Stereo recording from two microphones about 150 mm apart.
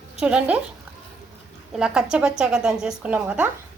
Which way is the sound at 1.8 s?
5° right (ahead or behind).